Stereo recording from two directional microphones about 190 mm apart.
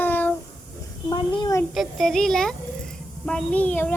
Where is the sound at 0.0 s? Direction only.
10° left (ahead or behind).